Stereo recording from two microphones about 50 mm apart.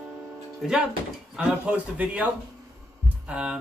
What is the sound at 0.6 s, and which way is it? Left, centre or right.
Music, centre.